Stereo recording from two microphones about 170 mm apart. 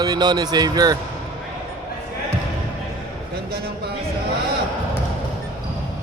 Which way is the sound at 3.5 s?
65° right (ahead or behind).